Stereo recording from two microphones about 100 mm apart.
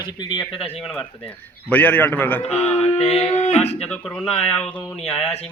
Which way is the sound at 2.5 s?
90° left.